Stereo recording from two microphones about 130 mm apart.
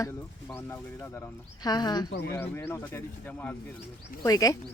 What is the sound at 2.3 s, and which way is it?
Speech, 20° left (ahead or behind).